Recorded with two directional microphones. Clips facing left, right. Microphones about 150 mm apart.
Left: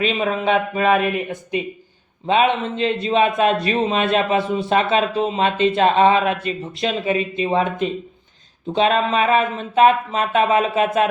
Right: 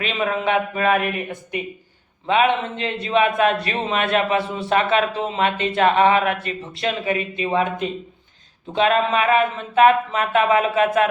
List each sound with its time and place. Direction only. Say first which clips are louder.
0.0 s a man's voice: left 2 dB; 20° left (ahead or behind)
2.2 s a man's voice: left 1 dB; 25° left (ahead or behind)
8.7 s a man's voice: left 1 dB; 25° left (ahead or behind)